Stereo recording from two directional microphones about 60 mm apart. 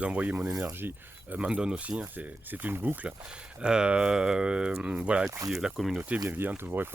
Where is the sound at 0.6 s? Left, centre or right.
Right.